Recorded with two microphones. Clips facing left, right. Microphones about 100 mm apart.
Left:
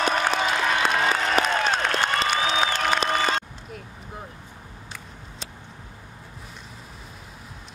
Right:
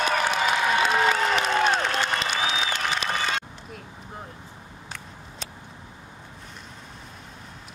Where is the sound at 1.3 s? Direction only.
45° left (ahead or behind).